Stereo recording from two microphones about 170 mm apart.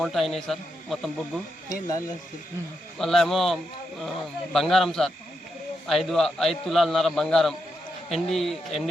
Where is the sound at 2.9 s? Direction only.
Centre (ahead or behind).